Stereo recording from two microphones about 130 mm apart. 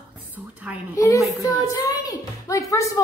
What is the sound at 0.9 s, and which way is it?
A woman's voice, 25° left (ahead or behind).